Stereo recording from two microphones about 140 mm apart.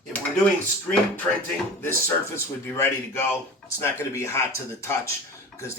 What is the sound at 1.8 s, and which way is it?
A man's voice, 20° left (ahead or behind).